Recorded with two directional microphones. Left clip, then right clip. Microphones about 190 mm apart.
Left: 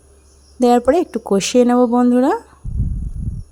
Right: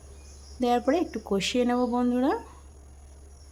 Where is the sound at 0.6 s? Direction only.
40° left (ahead or behind).